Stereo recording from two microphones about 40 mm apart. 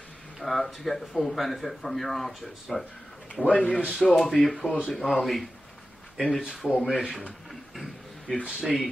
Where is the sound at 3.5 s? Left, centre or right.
Left.